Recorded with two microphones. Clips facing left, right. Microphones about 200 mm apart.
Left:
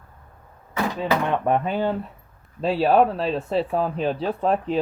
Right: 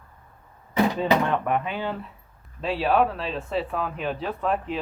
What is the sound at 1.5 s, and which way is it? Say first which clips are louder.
Speech: left 5 dB; 35° left (ahead or behind).